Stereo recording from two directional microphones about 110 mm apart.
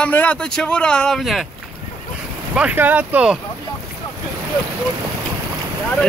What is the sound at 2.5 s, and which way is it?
Speech, 15° right (ahead or behind).